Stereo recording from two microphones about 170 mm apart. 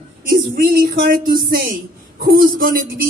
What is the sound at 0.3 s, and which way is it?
Speech, 60° right (ahead or behind).